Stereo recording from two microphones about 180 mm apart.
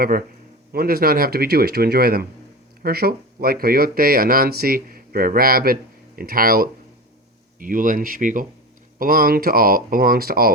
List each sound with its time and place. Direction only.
0.7 s speech: 55° right (ahead or behind)